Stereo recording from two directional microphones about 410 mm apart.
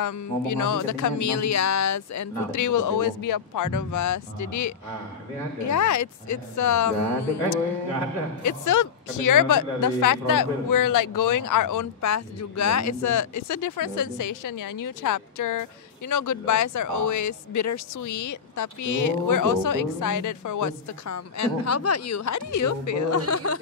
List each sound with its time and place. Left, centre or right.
0.0 s speech: left
8.5 s speech: left